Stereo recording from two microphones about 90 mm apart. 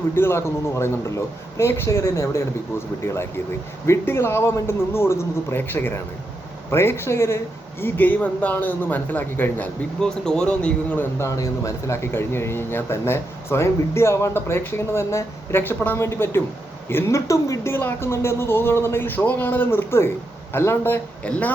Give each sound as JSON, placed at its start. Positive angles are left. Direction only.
{"t": 0.2, "sound": "a man's voice", "side_deg": 30}
{"t": 11.2, "sound": "speech", "side_deg": 35}